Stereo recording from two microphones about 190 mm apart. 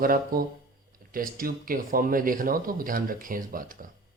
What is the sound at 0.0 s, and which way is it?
Speech, 50° right (ahead or behind).